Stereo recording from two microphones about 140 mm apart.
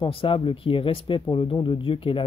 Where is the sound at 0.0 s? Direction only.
40° left (ahead or behind).